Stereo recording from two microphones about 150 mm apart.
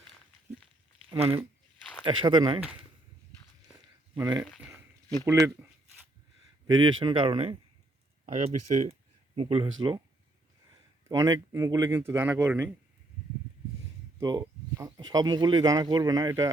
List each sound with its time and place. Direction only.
1.1 s a man's voice: 40° right (ahead or behind)
4.2 s speech: 25° right (ahead or behind)
6.7 s a man's voice: 30° right (ahead or behind)
8.3 s speech: 50° right (ahead or behind); by 10.0 s 35° right (ahead or behind)
11.1 s speech: 20° right (ahead or behind)
14.2 s speech: 25° right (ahead or behind)